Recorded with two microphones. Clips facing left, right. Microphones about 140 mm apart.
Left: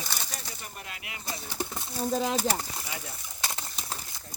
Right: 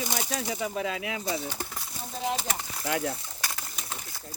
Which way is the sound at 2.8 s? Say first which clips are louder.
Right 11 dB; 65° right (ahead or behind).